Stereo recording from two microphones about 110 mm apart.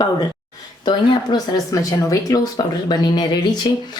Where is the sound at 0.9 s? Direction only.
35° left (ahead or behind).